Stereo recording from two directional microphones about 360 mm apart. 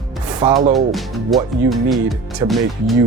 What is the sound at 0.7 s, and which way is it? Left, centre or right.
Speech, centre.